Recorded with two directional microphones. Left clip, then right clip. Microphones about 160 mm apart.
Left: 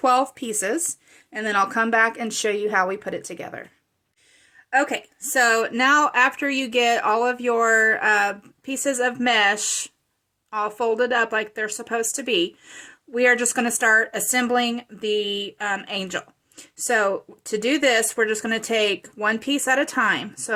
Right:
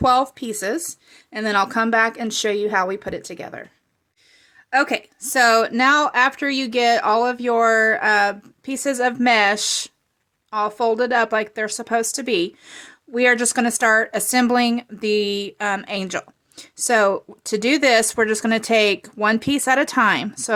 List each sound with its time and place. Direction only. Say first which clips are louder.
0.0 s speech: right 2 dB; 15° right (ahead or behind)
1.3 s speech: right 2 dB; 25° right (ahead or behind)
4.7 s speech: right 2 dB; 30° right (ahead or behind)